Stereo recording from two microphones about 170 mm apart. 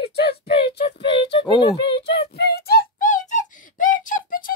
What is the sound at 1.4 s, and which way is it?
Speech, 30° left (ahead or behind).